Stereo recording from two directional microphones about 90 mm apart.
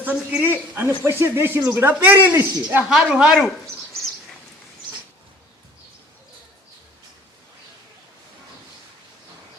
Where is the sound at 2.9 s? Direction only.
5° right (ahead or behind).